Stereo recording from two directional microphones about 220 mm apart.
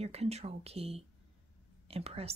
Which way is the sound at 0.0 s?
30° right (ahead or behind).